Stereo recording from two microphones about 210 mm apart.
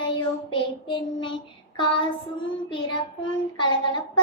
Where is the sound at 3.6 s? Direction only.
20° left (ahead or behind).